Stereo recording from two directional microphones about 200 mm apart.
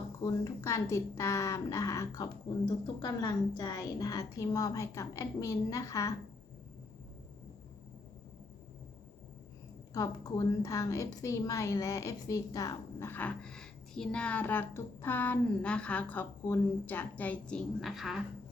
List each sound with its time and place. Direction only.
0.2 s a woman's voice: 15° left (ahead or behind)
9.9 s a woman's voice: 15° left (ahead or behind); by 18.2 s centre (ahead or behind)